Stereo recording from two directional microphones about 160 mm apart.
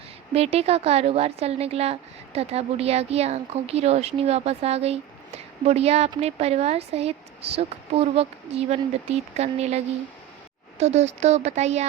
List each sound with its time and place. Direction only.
0.3 s a woman's voice: 40° right (ahead or behind)